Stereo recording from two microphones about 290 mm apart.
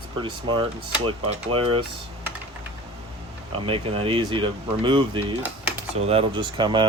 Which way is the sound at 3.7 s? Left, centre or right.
Centre.